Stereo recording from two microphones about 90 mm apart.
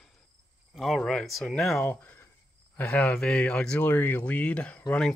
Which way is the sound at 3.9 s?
20° left (ahead or behind).